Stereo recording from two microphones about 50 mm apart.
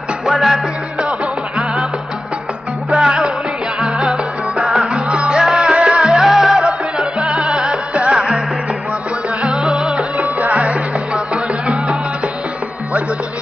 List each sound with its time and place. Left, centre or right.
0.3 s music: centre
2.9 s music: centre
6.2 s music: centre
9.4 s music: centre
9.9 s music: right